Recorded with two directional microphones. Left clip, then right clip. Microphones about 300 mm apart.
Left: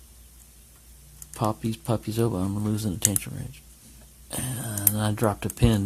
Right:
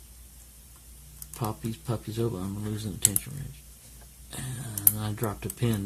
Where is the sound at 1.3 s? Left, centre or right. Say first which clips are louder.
Left 7 dB; left.